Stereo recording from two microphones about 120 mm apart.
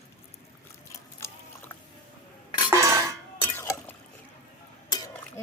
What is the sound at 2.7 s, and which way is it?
Cutlery, 25° right (ahead or behind).